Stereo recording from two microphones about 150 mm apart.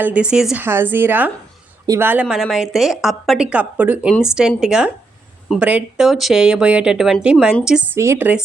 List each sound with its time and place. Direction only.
0.0 s a woman's voice: 10° right (ahead or behind)
2.2 s speech: centre (ahead or behind)
7.9 s a woman's voice: 20° right (ahead or behind)